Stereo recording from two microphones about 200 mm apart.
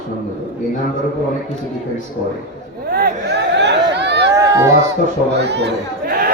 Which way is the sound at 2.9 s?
55° right (ahead or behind).